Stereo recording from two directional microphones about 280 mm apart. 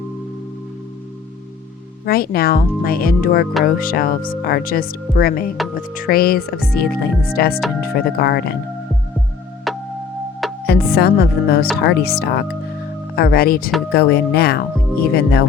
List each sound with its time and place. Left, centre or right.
2.0 s speech: left
9.7 s music: centre
10.7 s speech: left